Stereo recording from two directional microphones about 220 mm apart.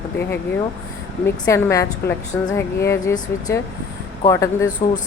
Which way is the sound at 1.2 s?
10° left (ahead or behind).